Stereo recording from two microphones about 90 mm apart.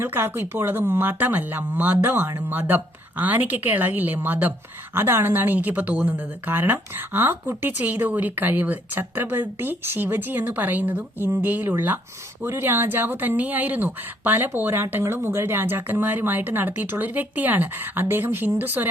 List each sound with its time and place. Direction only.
0.0 s a woman's voice: 25° right (ahead or behind)